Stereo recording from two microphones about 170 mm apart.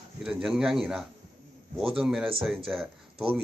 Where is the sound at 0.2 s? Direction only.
5° right (ahead or behind).